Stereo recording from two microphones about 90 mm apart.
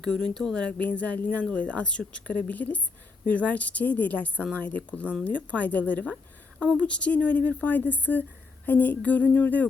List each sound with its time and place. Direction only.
0.0 s speech: 10° left (ahead or behind)